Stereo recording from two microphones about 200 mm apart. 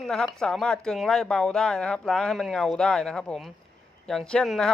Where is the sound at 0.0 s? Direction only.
5° left (ahead or behind).